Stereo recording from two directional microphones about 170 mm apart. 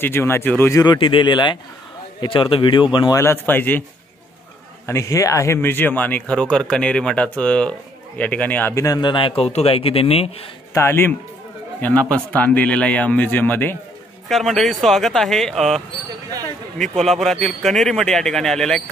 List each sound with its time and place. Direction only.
0.0 s speech: 15° left (ahead or behind)
0.9 s speech: 30° left (ahead or behind)
3.2 s speech: 15° left (ahead or behind)
4.8 s speech: 20° left (ahead or behind); by 10.3 s 35° left (ahead or behind)
10.7 s speech: 15° left (ahead or behind)
14.3 s speech: centre (ahead or behind)